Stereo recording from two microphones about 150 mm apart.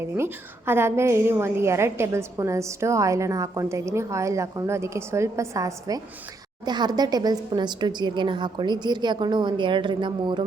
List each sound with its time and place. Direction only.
0.0 s a woman's voice: 15° right (ahead or behind); by 10.4 s 30° right (ahead or behind)